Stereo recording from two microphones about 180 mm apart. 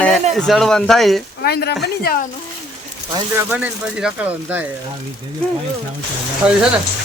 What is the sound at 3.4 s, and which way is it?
Speech, 5° right (ahead or behind).